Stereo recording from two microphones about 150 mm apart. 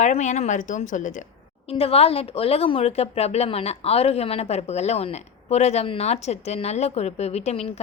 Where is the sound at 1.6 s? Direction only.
40° left (ahead or behind).